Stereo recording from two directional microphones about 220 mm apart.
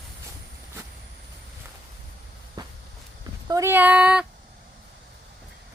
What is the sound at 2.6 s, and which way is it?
Walk, 15° right (ahead or behind).